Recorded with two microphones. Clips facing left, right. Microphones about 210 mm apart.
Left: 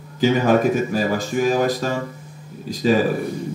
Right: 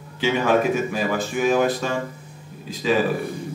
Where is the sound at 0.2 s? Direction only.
40° left (ahead or behind).